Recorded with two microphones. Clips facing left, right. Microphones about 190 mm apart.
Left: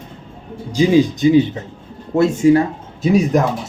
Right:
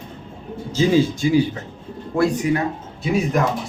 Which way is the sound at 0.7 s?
15° left (ahead or behind).